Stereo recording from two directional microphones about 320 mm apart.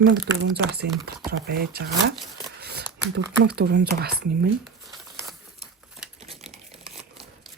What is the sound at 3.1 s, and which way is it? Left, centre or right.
Speech, right.